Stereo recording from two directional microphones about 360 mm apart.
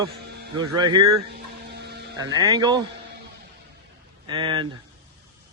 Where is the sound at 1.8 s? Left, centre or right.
Right.